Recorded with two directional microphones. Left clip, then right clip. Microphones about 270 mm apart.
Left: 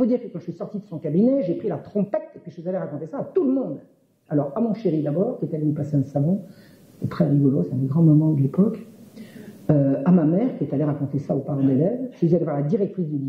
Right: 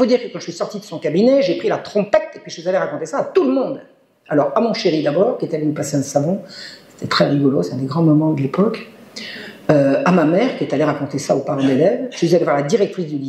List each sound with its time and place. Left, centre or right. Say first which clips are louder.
0.0 s speech: right 7 dB; centre